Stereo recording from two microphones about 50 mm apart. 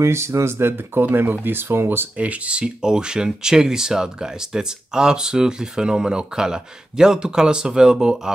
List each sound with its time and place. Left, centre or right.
0.0 s speech: right
2.1 s speech: right
2.6 s speech: centre